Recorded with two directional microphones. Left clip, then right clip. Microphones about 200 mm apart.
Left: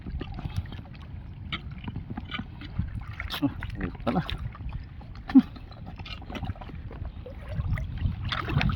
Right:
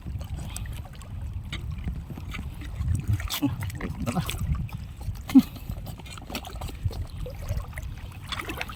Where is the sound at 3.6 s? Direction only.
15° right (ahead or behind).